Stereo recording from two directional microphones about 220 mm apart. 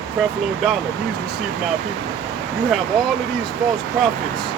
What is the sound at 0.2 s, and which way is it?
Speech, centre (ahead or behind).